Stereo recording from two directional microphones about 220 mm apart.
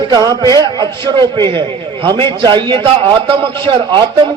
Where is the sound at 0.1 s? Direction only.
20° right (ahead or behind).